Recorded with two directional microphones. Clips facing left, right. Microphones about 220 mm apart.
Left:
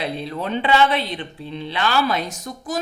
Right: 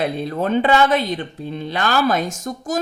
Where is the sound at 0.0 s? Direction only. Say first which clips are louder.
Right 5 dB; 50° right (ahead or behind).